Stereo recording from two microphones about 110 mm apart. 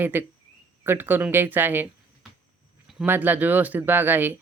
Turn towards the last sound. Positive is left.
turn(degrees=-20)  # may be behind; listen again after turning